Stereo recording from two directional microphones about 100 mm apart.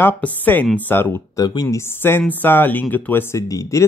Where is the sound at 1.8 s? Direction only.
20° left (ahead or behind).